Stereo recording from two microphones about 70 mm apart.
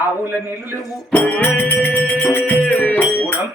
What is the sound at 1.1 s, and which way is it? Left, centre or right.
Music, left.